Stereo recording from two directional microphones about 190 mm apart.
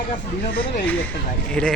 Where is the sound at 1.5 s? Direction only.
5° left (ahead or behind).